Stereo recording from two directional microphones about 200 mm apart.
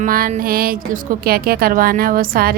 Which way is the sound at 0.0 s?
45° right (ahead or behind).